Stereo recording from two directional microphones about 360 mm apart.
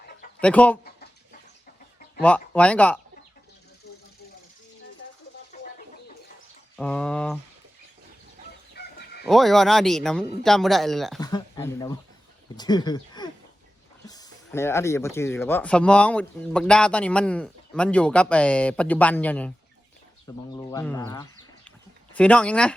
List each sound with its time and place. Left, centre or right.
0.4 s speech: centre
0.9 s bird: left
2.2 s speech: centre
3.9 s vehicle: left
5.5 s bird: left
6.7 s speech: centre
8.7 s fowl: left
9.2 s speech: centre
11.2 s speech: centre